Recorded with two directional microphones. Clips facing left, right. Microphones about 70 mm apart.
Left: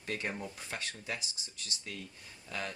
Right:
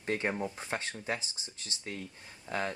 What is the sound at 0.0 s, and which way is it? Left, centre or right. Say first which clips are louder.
Speech: right 6 dB; right.